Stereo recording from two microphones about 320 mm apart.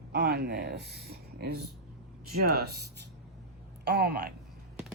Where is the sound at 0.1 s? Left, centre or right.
Right.